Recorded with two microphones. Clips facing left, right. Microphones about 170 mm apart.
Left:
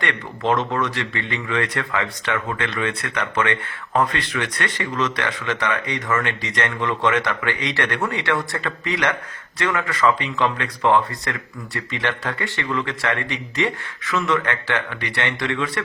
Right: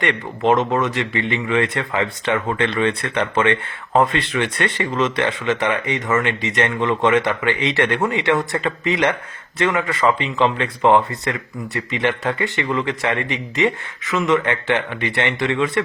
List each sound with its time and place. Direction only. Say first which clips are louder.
0.0 s a man's voice: right 5 dB; 20° right (ahead or behind)